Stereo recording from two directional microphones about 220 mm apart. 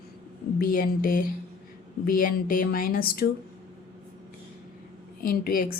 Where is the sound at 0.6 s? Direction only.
40° left (ahead or behind).